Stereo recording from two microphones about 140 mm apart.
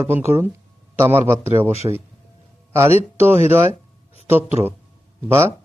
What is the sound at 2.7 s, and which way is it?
Speech, 15° right (ahead or behind).